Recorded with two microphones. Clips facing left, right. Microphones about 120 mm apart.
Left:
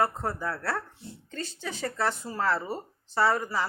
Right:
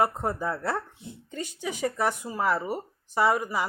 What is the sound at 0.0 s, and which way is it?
Speech, 20° right (ahead or behind).